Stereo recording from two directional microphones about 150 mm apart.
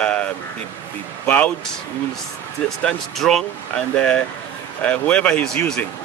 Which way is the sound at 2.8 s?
Centre (ahead or behind).